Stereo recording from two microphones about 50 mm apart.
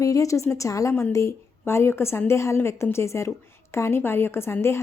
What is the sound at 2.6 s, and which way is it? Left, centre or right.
A woman's voice, left.